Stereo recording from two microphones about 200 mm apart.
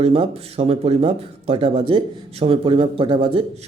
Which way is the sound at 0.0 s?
30° right (ahead or behind).